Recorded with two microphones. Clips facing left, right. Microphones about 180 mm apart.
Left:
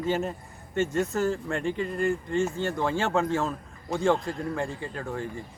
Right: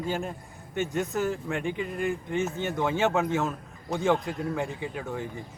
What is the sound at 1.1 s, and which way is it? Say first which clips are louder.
Speech: left 1 dB; 15° right (ahead or behind).